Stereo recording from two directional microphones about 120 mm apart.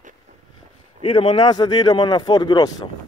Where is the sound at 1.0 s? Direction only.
45° left (ahead or behind).